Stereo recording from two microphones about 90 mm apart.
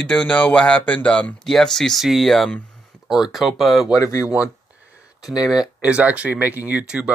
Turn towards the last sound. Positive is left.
turn(degrees=-15)  # may be behind; listen again after turning